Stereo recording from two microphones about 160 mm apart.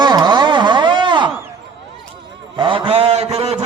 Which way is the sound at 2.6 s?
30° right (ahead or behind).